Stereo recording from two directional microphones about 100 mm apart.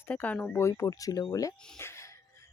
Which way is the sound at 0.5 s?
30° left (ahead or behind).